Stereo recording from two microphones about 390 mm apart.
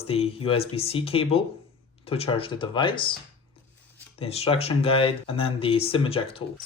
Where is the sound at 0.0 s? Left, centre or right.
Centre.